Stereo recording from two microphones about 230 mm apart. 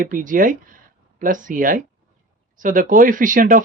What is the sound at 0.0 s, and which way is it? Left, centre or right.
Speech, right.